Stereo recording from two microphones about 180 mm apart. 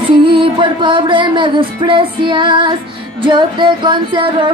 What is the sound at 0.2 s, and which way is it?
Music, 30° right (ahead or behind).